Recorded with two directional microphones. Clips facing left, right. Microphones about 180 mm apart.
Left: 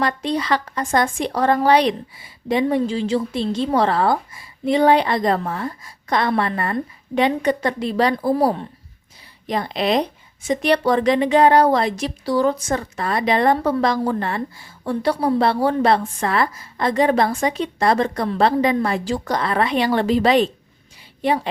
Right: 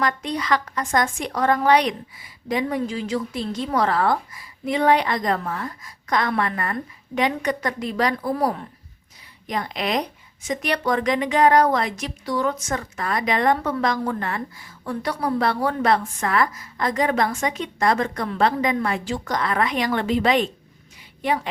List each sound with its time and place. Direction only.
0.0 s a woman's voice: 30° left (ahead or behind)